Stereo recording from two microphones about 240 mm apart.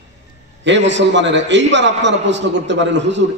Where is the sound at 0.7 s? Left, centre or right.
Right.